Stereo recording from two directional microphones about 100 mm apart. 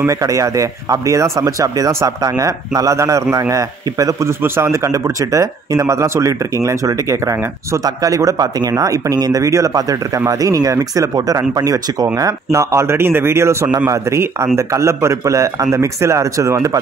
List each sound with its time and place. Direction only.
0.0 s a man's voice: 35° right (ahead or behind)